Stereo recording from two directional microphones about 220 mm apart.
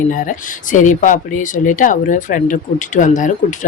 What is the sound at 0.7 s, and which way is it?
Speech, 35° left (ahead or behind).